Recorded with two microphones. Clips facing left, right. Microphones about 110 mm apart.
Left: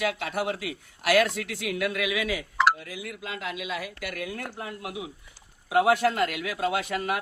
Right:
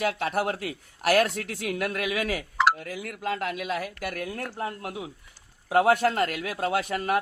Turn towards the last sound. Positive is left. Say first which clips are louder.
# right 1 dB
turn(degrees=-45)  # may be behind; listen again after turning